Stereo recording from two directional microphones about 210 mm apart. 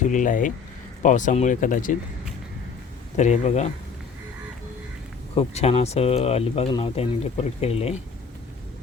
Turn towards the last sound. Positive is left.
turn(degrees=30)  # may be behind; listen again after turning